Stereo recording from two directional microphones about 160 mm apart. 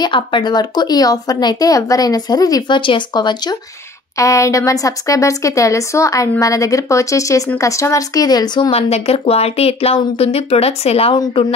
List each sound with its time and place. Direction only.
0.0 s speech: 30° left (ahead or behind)